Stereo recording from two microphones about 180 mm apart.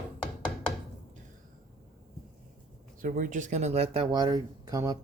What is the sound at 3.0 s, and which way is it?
Speech, 45° right (ahead or behind).